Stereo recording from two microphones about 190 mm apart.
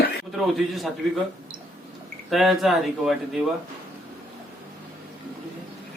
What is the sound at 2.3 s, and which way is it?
Speech, centre (ahead or behind).